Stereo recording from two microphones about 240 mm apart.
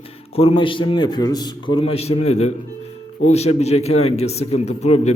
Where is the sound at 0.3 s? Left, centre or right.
Left.